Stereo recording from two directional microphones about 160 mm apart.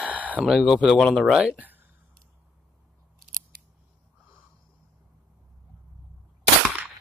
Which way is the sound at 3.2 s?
65° right (ahead or behind).